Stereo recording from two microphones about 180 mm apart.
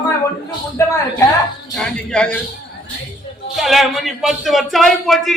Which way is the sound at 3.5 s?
Centre (ahead or behind).